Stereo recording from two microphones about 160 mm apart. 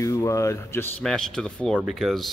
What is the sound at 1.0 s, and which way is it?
A man's voice, 5° left (ahead or behind).